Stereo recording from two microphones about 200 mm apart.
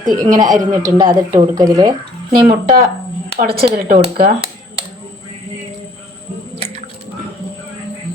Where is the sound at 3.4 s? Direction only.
50° right (ahead or behind).